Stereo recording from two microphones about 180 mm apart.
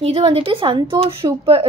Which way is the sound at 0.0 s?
30° right (ahead or behind).